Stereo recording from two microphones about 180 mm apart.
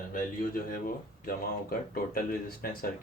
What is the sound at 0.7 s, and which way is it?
Speech, 55° left (ahead or behind).